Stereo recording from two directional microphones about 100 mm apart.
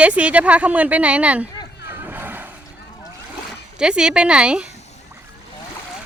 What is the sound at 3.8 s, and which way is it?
Speech, 10° right (ahead or behind).